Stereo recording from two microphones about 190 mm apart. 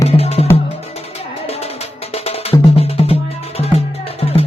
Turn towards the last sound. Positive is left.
turn(degrees=30)  # may be behind; listen again after turning